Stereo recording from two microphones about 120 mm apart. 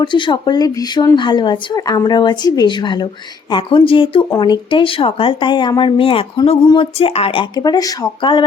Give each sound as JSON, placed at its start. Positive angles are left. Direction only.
{"t": 0.0, "sound": "speech", "side_deg": 40}